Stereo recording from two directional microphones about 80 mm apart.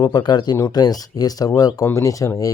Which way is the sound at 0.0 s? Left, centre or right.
Left.